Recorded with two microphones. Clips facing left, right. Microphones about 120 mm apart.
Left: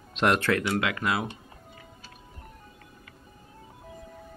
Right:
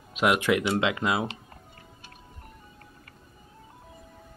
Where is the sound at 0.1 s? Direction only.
5° right (ahead or behind).